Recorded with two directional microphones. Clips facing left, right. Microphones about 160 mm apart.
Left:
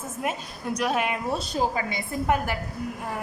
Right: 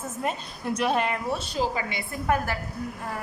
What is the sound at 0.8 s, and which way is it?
Speech, 5° left (ahead or behind).